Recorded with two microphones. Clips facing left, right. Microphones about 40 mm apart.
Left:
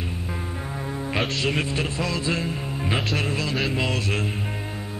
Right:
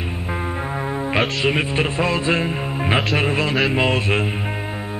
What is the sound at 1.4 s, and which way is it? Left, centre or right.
Music, right.